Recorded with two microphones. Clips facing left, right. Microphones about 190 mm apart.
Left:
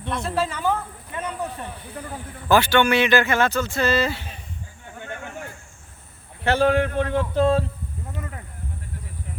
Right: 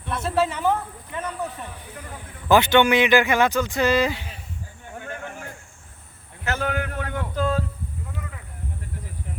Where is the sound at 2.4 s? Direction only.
20° right (ahead or behind).